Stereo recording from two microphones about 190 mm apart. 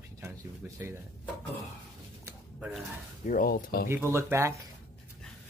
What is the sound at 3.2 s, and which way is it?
Speech, 45° left (ahead or behind).